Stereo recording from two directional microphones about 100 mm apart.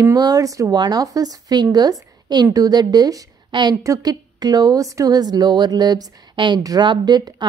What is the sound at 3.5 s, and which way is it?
A woman's voice, 50° right (ahead or behind).